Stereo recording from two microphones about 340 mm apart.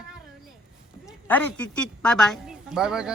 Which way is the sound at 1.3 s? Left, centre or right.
Centre.